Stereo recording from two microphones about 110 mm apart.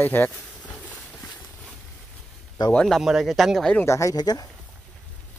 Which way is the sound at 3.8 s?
25° left (ahead or behind).